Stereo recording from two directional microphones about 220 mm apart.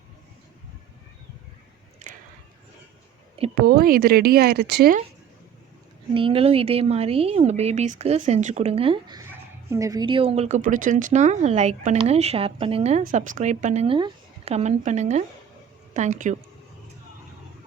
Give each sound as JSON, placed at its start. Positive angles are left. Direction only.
{"t": 3.5, "sound": "speech", "side_deg": -40}
{"t": 6.1, "sound": "a woman's voice", "side_deg": -25}